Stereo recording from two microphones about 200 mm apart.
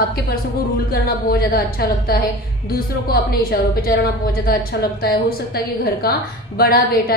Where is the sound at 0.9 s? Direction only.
50° left (ahead or behind).